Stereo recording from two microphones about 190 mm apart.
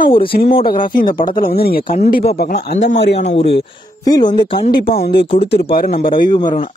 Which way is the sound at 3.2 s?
30° left (ahead or behind).